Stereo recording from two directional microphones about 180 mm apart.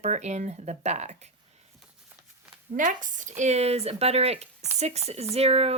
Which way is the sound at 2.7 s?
45° right (ahead or behind).